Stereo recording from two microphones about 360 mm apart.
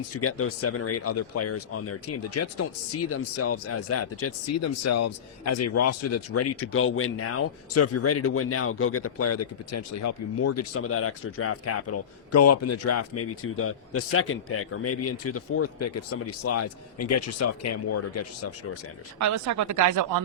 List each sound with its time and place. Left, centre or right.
0.2 s speech: left
19.2 s speech: right